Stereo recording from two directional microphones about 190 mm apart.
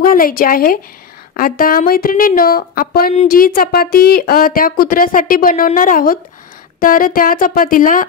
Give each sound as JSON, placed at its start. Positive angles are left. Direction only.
{"t": 0.0, "sound": "speech", "side_deg": 45}